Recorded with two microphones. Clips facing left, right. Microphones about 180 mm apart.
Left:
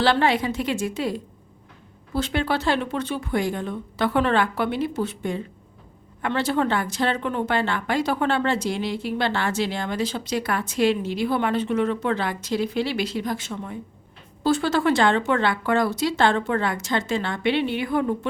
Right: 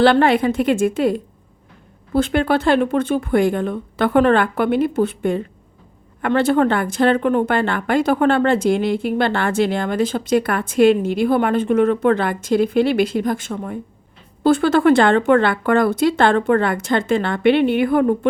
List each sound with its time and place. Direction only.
0.0 s a woman's voice: 55° right (ahead or behind)